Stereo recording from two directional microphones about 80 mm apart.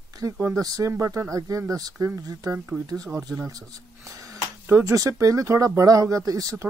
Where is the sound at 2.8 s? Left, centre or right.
Right.